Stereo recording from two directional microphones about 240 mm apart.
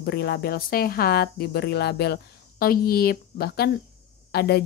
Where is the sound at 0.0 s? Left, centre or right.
Left.